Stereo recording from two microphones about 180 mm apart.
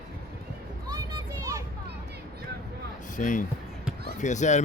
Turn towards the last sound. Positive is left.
turn(degrees=40)  # may be behind; listen again after turning